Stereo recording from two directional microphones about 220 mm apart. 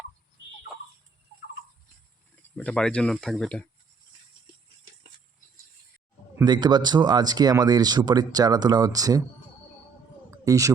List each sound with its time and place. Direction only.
2.6 s speech: 5° left (ahead or behind)
6.3 s speech: 20° right (ahead or behind)
10.3 s a sound: 15° right (ahead or behind)